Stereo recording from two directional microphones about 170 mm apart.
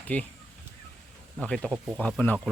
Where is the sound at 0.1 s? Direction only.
10° left (ahead or behind).